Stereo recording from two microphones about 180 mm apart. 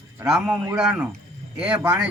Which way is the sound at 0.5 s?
15° right (ahead or behind).